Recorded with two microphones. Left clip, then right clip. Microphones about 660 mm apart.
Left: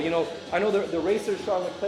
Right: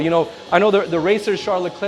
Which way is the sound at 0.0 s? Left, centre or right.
Right.